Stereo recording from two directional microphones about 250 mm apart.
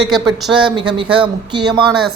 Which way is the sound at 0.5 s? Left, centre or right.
Centre.